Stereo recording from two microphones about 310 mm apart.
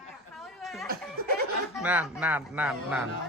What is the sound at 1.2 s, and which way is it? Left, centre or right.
Speech, right.